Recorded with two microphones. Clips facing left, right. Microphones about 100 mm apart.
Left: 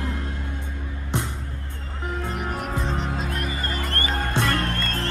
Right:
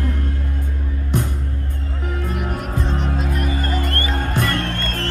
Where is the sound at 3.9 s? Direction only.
30° left (ahead or behind).